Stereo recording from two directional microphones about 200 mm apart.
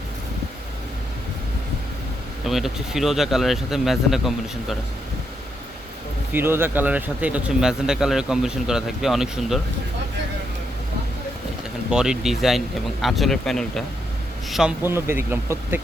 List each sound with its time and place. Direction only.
2.5 s speech: centre (ahead or behind)
6.3 s speech: 10° right (ahead or behind)
11.9 s speech: 5° right (ahead or behind)